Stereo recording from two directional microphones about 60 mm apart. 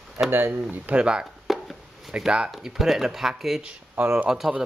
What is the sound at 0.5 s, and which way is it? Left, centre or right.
Speech, right.